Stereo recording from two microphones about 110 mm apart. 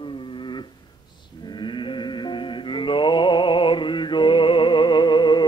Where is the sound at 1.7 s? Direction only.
45° left (ahead or behind).